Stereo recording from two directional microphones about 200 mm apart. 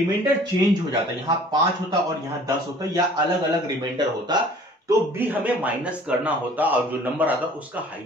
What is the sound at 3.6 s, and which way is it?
Speech, 20° right (ahead or behind).